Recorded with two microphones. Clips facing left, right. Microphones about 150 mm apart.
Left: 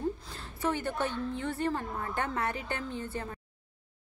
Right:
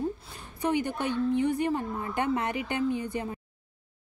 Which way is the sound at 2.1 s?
15° right (ahead or behind).